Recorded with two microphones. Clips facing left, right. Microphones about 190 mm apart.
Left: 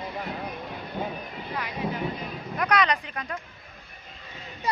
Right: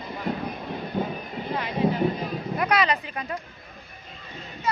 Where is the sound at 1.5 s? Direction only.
25° right (ahead or behind).